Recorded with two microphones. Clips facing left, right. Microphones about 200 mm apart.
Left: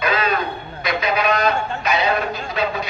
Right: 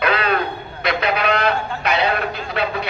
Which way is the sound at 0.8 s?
60° right (ahead or behind).